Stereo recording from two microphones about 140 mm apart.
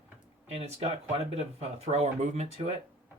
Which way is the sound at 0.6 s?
45° right (ahead or behind).